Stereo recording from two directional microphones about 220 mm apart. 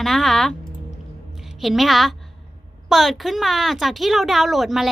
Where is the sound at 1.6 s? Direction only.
Centre (ahead or behind).